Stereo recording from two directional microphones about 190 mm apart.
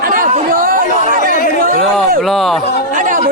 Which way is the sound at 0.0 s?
45° right (ahead or behind).